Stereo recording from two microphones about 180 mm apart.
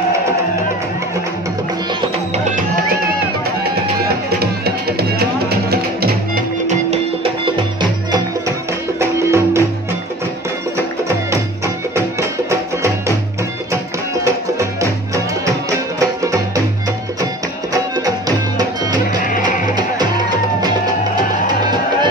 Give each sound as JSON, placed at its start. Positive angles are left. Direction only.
{"t": 4.4, "sound": "music", "side_deg": -60}
{"t": 7.4, "sound": "music", "side_deg": -25}
{"t": 11.2, "sound": "music", "side_deg": -15}
{"t": 14.2, "sound": "music", "side_deg": -15}
{"t": 16.0, "sound": "music", "side_deg": -20}
{"t": 17.7, "sound": "music", "side_deg": -20}
{"t": 19.2, "sound": "music", "side_deg": 45}